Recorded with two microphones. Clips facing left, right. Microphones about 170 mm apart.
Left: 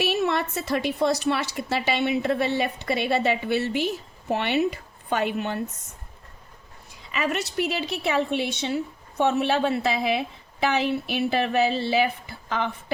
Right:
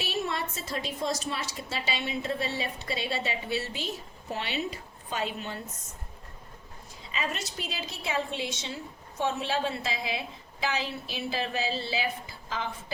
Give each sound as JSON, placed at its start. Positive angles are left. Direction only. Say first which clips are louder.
{"t": 0.0, "sound": "a woman's voice", "louder": "left 8 dB", "side_deg": 70}
{"t": 7.1, "sound": "a woman's voice", "louder": "left 7 dB", "side_deg": 65}